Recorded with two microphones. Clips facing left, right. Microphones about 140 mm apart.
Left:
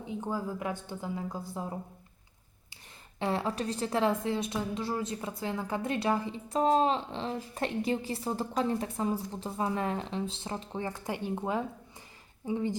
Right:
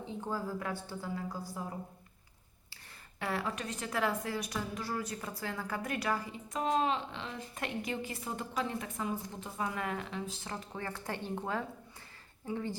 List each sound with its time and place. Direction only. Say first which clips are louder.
0.0 s a woman's voice: left 3 dB; 15° left (ahead or behind)
3.2 s a woman's voice: left 5 dB; 25° left (ahead or behind)